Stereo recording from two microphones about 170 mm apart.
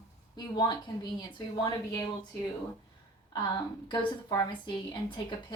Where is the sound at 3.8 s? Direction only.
25° left (ahead or behind).